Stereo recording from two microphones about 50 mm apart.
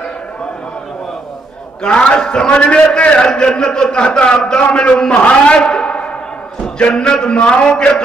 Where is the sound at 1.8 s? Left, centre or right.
Left.